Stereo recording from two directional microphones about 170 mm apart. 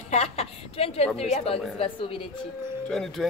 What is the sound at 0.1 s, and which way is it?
A woman's voice, 40° left (ahead or behind).